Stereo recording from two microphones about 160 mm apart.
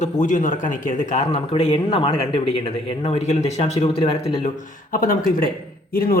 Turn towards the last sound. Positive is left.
turn(degrees=70)  # may be behind; listen again after turning